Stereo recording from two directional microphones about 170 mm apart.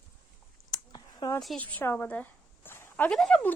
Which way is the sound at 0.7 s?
25° left (ahead or behind).